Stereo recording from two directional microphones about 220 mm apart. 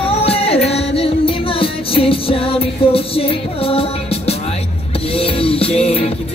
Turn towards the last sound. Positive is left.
turn(degrees=25)  # may be behind; listen again after turning